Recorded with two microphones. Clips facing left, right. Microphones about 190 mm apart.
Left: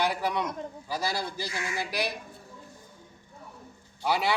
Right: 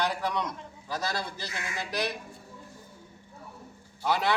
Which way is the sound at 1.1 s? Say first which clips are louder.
Left 2 dB; 20° right (ahead or behind).